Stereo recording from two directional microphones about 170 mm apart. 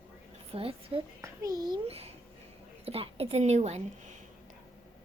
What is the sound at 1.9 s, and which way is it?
Speech, 35° right (ahead or behind).